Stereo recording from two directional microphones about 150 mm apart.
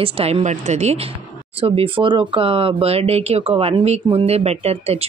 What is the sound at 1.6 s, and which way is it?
Speech, 35° right (ahead or behind).